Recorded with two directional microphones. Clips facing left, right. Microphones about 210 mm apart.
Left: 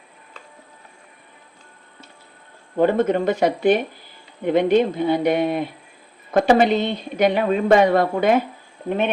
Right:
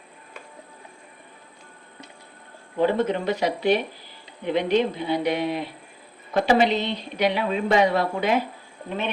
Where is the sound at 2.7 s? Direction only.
50° left (ahead or behind).